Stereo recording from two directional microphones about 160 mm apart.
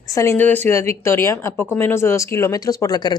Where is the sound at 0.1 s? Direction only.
20° left (ahead or behind).